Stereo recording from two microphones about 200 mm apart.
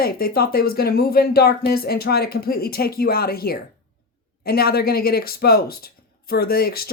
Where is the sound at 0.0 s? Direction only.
50° left (ahead or behind).